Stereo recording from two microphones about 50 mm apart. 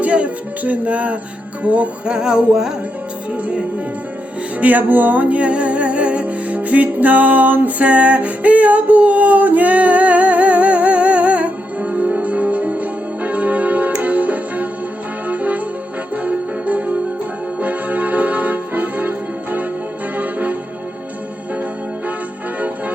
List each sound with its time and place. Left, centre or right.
0.0 s music: right; by 2.7 s centre
3.3 s music: right
4.6 s music: right